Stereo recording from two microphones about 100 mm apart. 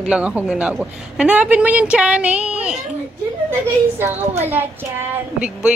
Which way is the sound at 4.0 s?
20° right (ahead or behind).